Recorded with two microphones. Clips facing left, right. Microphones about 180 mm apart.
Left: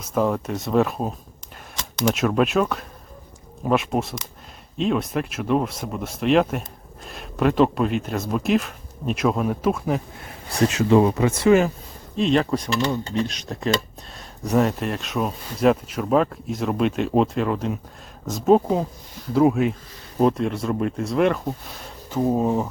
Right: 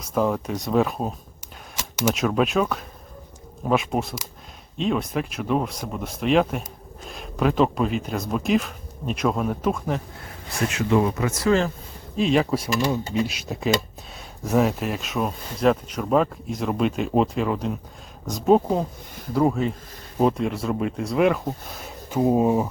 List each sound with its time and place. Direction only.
0.1 s speech: centre (ahead or behind)
10.5 s speech: 35° left (ahead or behind)
12.1 s speech: 5° right (ahead or behind)
20.1 s speech: centre (ahead or behind)